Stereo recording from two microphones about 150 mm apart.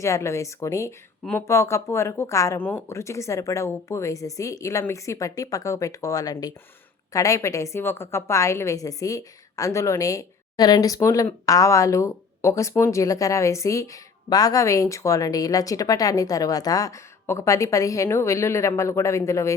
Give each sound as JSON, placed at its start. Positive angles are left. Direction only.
{"t": 0.0, "sound": "speech", "side_deg": 20}